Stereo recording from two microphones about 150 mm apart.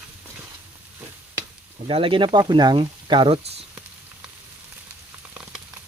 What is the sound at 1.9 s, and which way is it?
Speech, 40° right (ahead or behind).